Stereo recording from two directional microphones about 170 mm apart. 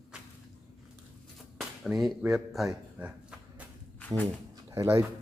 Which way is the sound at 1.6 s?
Centre (ahead or behind).